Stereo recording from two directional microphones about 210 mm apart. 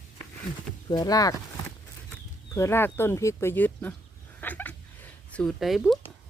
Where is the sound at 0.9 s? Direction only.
15° left (ahead or behind).